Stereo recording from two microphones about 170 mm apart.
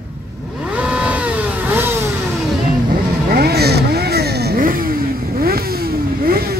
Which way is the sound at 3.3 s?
70° right (ahead or behind).